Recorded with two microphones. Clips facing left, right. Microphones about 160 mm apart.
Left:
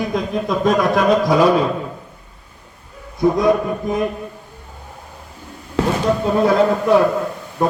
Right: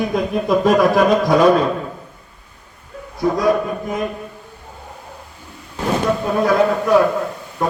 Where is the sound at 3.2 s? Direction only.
20° left (ahead or behind).